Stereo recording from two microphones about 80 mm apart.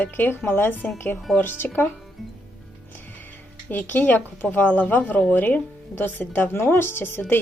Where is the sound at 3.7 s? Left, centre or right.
Left.